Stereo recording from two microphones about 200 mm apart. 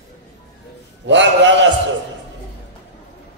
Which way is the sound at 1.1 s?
65° right (ahead or behind).